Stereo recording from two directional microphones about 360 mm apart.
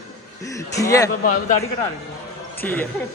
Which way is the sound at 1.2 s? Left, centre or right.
Left.